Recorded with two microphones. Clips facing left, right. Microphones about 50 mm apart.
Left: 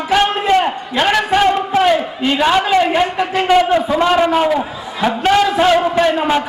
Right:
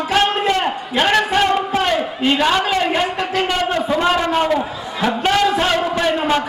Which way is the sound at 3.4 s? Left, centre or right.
Centre.